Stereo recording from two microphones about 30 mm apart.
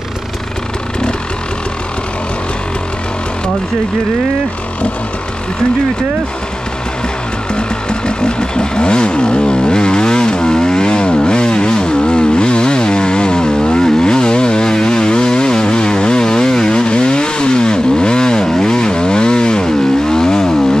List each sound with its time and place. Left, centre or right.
7.5 s vehicle: left